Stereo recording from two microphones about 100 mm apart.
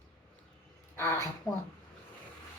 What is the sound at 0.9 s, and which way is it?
Speech, 25° left (ahead or behind).